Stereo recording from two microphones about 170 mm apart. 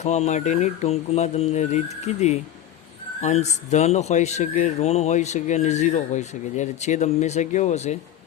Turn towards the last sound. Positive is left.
turn(degrees=40)  # may be behind; listen again after turning